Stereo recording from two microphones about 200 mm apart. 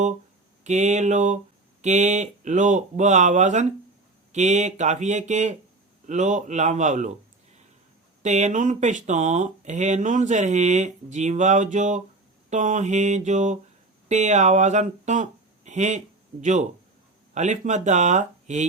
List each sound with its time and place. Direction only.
0.6 s speech: 35° right (ahead or behind)
8.2 s speech: 35° right (ahead or behind)